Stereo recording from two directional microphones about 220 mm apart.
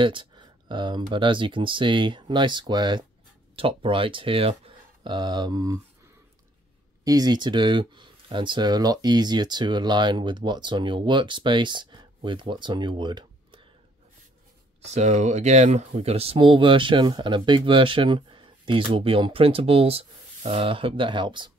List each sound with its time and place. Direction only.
0.0 s speech: 20° right (ahead or behind)
7.1 s speech: 15° right (ahead or behind)
14.9 s speech: 30° right (ahead or behind)